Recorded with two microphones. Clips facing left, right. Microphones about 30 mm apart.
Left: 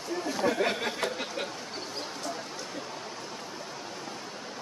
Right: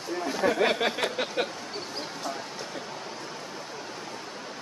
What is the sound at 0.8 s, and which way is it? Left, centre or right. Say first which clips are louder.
Speech: right 4 dB; right.